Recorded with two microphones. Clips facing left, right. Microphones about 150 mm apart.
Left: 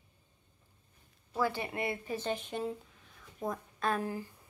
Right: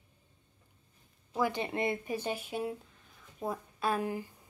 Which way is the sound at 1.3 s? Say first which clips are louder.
Right 1 dB; 15° right (ahead or behind).